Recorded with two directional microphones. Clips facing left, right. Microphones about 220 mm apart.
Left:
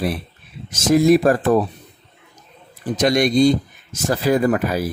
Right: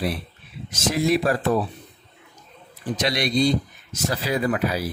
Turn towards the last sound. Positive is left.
turn(degrees=50)  # may be behind; listen again after turning